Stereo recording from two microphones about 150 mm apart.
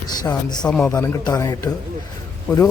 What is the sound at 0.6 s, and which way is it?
Speech, 5° left (ahead or behind).